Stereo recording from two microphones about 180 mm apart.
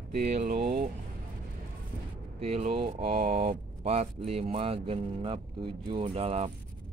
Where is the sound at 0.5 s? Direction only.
60° right (ahead or behind).